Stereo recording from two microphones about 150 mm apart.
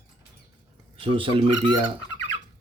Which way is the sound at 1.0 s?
35° right (ahead or behind).